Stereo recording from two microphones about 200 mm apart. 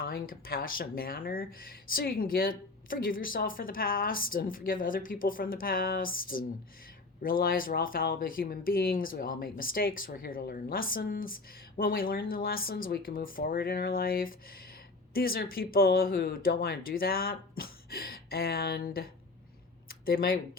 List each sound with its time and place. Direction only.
0.0 s speech: 50° left (ahead or behind)